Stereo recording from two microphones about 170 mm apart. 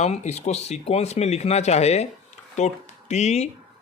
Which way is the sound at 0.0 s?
40° left (ahead or behind).